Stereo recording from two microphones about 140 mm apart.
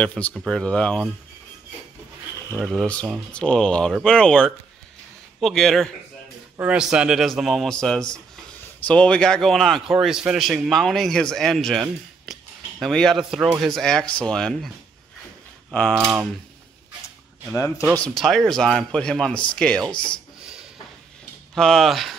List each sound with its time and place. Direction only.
0.4 s a man's voice: 5° left (ahead or behind)
2.6 s a man's voice: centre (ahead or behind)
17.6 s speech: 20° left (ahead or behind)
17.9 s a man's voice: 5° left (ahead or behind)
21.5 s a man's voice: 5° left (ahead or behind)